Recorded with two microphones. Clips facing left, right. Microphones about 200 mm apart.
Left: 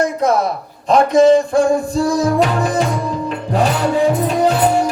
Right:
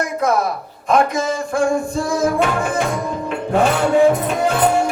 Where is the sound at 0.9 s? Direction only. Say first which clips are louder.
Left 7 dB; 30° left (ahead or behind).